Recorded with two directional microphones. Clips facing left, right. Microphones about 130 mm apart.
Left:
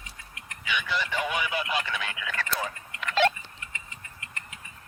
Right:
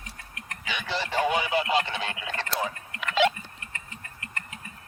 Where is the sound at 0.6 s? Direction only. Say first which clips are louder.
Left 1 dB; 30° right (ahead or behind).